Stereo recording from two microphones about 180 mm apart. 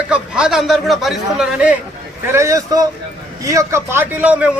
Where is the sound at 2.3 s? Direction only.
15° right (ahead or behind).